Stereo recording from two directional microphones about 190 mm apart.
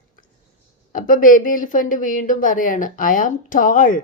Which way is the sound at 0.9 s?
45° left (ahead or behind).